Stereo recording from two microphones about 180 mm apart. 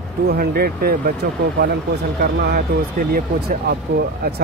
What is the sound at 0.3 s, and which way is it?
Speech, 55° right (ahead or behind).